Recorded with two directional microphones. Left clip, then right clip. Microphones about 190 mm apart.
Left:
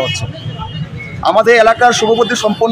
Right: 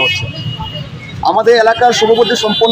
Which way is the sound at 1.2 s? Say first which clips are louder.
Left 1 dB; 15° left (ahead or behind).